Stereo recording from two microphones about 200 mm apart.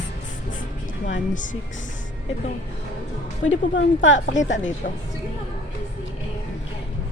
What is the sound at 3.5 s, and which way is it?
Speech, 70° left (ahead or behind).